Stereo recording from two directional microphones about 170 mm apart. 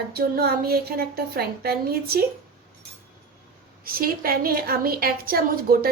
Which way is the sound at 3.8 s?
60° right (ahead or behind).